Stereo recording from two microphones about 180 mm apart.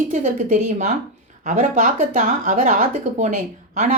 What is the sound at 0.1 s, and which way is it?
Speech, 45° right (ahead or behind).